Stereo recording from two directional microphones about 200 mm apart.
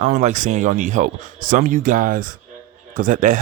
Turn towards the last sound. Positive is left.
turn(degrees=-40)  # may be behind; listen again after turning